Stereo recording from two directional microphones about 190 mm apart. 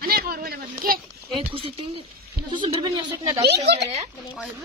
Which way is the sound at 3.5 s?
65° right (ahead or behind).